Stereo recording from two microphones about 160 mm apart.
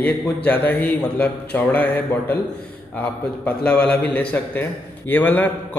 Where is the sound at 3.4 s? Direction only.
5° left (ahead or behind).